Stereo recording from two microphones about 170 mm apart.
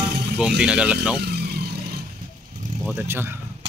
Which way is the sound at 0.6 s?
5° right (ahead or behind).